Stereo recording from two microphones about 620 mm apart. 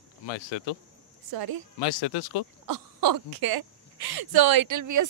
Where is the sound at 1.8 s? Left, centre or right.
Left.